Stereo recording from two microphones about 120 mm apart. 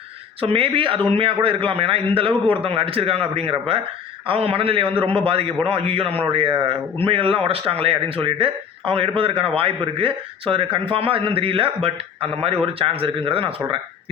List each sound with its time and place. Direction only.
0.4 s a man's voice: 50° right (ahead or behind)